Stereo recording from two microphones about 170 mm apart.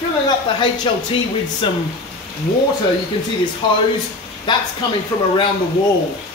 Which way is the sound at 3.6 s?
30° left (ahead or behind).